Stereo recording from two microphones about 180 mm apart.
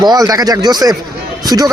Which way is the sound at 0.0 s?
20° right (ahead or behind).